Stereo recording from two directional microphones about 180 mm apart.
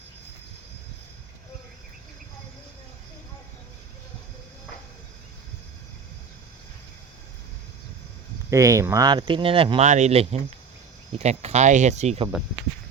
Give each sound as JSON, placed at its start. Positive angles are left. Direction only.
{"t": 8.4, "sound": "speech", "side_deg": -15}